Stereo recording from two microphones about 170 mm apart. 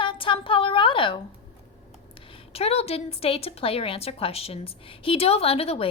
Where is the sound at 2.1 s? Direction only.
30° left (ahead or behind).